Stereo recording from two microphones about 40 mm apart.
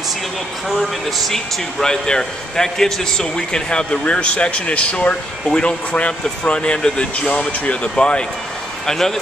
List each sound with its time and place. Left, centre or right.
1.3 s a man's voice: centre
8.8 s speech: centre